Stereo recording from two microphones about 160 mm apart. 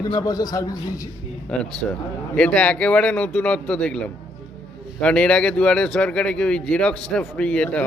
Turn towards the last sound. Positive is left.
turn(degrees=5)  # may be behind; listen again after turning